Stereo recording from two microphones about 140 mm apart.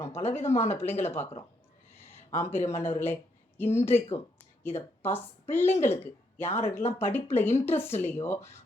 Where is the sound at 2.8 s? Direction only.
15° left (ahead or behind).